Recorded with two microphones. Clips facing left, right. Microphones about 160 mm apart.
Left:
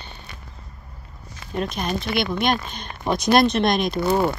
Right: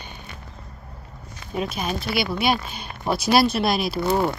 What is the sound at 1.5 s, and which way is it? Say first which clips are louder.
A woman's voice: left 1 dB; 5° right (ahead or behind).